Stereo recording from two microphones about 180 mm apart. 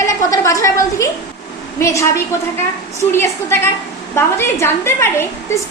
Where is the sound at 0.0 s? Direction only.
15° left (ahead or behind).